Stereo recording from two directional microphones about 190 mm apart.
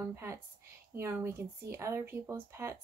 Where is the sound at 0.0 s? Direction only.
15° right (ahead or behind).